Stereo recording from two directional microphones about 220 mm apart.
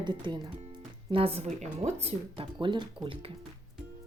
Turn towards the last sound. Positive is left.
turn(degrees=-25)  # may be behind; listen again after turning